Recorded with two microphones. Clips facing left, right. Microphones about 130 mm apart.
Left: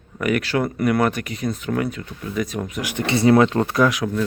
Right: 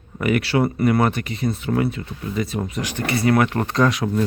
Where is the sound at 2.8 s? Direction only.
20° left (ahead or behind); by 4.1 s centre (ahead or behind).